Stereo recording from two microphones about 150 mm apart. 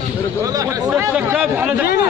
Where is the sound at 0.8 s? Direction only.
10° right (ahead or behind).